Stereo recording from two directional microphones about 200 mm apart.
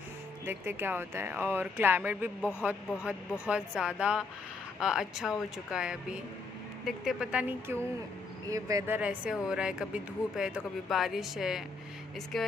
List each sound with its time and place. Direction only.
0.5 s speech: 10° right (ahead or behind)